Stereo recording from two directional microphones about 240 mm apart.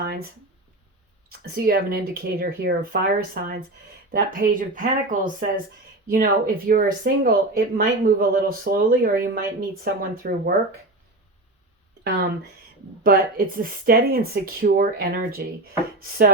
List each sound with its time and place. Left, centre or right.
0.0 s a sound: right
1.3 s speech: right
13.0 s speech: right
16.0 s chopping: right